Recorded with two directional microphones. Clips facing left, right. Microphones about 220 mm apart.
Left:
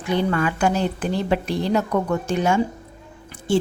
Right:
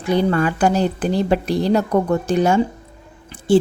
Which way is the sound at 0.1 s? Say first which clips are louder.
Right 4 dB; 40° right (ahead or behind).